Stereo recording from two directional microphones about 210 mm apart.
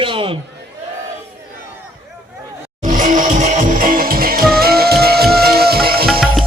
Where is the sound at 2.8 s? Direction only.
40° right (ahead or behind).